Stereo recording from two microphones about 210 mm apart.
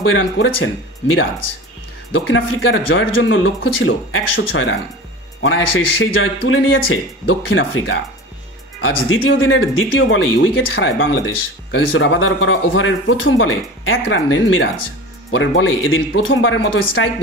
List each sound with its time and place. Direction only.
0.0 s speech: 70° left (ahead or behind)
2.1 s speech: 65° left (ahead or behind)